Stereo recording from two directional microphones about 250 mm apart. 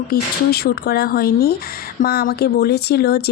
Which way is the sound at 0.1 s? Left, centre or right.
Left.